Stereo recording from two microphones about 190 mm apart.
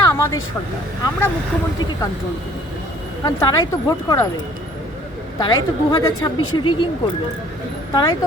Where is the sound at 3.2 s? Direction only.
20° left (ahead or behind).